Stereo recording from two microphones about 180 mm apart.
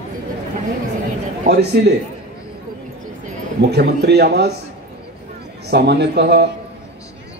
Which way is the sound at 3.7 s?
65° right (ahead or behind).